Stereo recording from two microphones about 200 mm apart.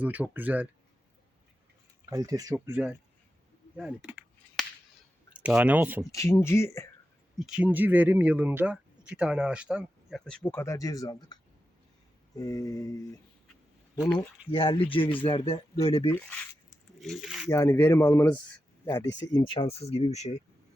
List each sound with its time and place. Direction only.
0.0 s speech: 10° right (ahead or behind)
2.0 s speech: 15° right (ahead or behind)
3.8 s a sound: 5° right (ahead or behind)
5.3 s speech: 5° right (ahead or behind)
6.1 s speech: 15° left (ahead or behind)
7.3 s speech: 5° right (ahead or behind); by 13.1 s 20° left (ahead or behind)
14.2 s speech: 25° left (ahead or behind)
17.0 s speech: centre (ahead or behind)
17.5 s speech: 15° left (ahead or behind)
19.5 s speech: 30° left (ahead or behind)